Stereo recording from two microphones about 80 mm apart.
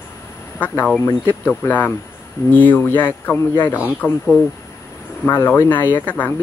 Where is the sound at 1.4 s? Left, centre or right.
Left.